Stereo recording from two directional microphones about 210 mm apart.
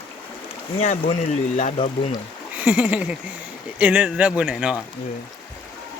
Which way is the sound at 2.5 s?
5° right (ahead or behind).